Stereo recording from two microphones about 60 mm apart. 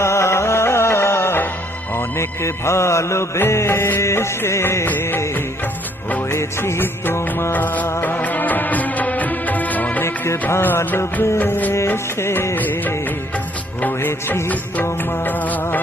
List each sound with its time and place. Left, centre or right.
0.0 s music: left
4.9 s music: left
6.3 s music: left
7.5 s music: left
10.8 s music: left
12.2 s music: left
12.5 s music: left